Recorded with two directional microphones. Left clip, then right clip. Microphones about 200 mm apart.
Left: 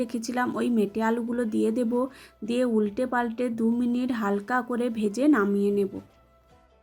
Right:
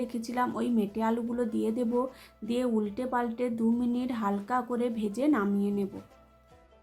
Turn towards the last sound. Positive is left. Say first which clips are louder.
# left 7 dB
turn(degrees=25)  # may be behind; listen again after turning